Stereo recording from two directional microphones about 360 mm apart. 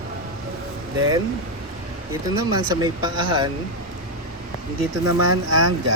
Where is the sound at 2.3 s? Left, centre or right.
Centre.